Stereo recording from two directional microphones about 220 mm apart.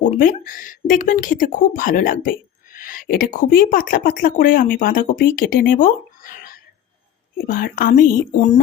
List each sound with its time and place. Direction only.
0.2 s speech: 40° left (ahead or behind)